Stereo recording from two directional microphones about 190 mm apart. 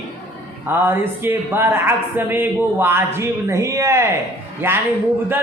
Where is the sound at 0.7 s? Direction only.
10° right (ahead or behind).